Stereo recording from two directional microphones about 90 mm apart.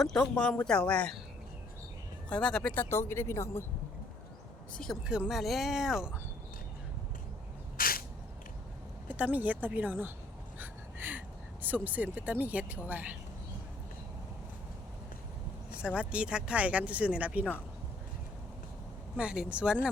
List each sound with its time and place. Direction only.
0.0 s speech: centre (ahead or behind)
0.3 s speech: 10° left (ahead or behind)
2.3 s speech: 10° left (ahead or behind)
2.7 s speech: 25° left (ahead or behind)
5.0 s speech: 10° right (ahead or behind)
9.0 s speech: 15° right (ahead or behind)
10.6 s a sound: 20° right (ahead or behind)
11.6 s speech: 20° right (ahead or behind)
16.0 s speech: 10° right (ahead or behind)
19.1 s speech: 10° right (ahead or behind)